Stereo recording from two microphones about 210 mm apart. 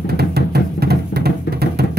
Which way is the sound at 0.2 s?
50° right (ahead or behind).